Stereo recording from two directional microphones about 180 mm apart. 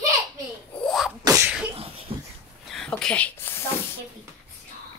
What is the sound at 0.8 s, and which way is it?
Sneeze, centre (ahead or behind).